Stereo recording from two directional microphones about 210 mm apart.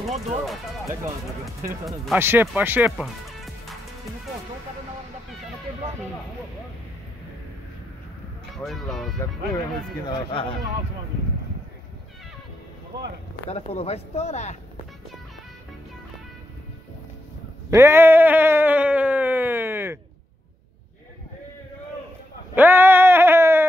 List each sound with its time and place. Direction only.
1.4 s speech: centre (ahead or behind)
8.5 s speech: centre (ahead or behind)
10.0 s speech: 25° left (ahead or behind)
13.5 s speech: 30° left (ahead or behind)
17.6 s a sound: 15° right (ahead or behind)
22.6 s a sound: 10° right (ahead or behind)